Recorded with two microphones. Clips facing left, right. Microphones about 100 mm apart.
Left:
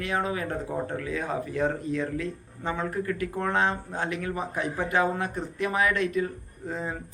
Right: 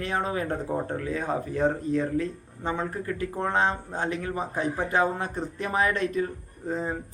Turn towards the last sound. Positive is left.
turn(degrees=-30)  # may be behind; listen again after turning